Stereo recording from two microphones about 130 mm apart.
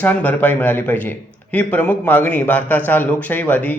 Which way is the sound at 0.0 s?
10° left (ahead or behind).